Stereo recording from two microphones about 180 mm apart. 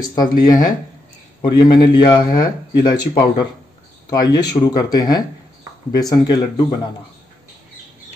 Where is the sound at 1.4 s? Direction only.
25° left (ahead or behind).